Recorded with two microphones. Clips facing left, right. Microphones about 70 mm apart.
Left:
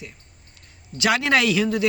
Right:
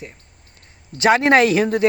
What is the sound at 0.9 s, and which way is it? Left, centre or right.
Speech, right.